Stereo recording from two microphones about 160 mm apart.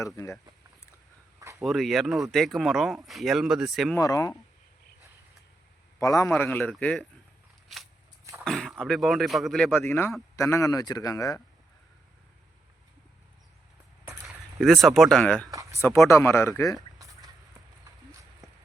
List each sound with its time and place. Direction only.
1.5 s speech: centre (ahead or behind)
3.9 s speech: 20° left (ahead or behind)
6.0 s speech: 20° left (ahead or behind)
6.3 s speech: 10° left (ahead or behind)
8.2 s throat clearing: 20° right (ahead or behind)
8.4 s speech: 5° left (ahead or behind)
9.7 s speech: 15° left (ahead or behind)
14.3 s speech: centre (ahead or behind)
16.0 s speech: 15° left (ahead or behind)